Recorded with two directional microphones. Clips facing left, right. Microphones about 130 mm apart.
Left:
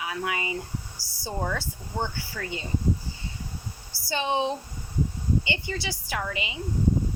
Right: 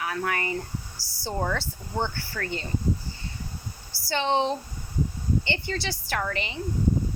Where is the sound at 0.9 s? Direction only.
50° left (ahead or behind).